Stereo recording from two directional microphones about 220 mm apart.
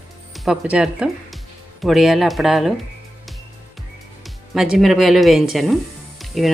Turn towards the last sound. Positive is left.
turn(degrees=0)  # may be behind; listen again after turning